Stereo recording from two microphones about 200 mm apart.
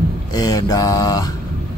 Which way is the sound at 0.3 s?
20° left (ahead or behind).